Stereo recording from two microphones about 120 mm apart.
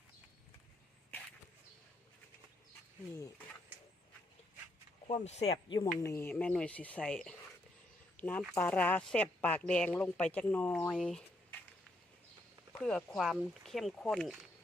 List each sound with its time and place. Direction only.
5.0 s speech: 65° left (ahead or behind)
5.6 s a woman's voice: 40° left (ahead or behind)
6.0 s speech: 20° left (ahead or behind); by 11.2 s 5° left (ahead or behind)
12.8 s speech: 10° left (ahead or behind)